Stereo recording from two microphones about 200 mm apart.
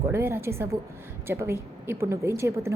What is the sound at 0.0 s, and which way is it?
Speech, 15° right (ahead or behind).